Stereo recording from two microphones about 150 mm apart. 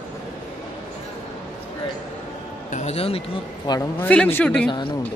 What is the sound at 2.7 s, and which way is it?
Speech, 45° left (ahead or behind).